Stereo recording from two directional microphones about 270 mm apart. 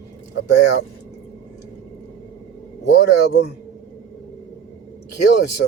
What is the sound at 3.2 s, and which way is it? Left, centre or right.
Speech, left.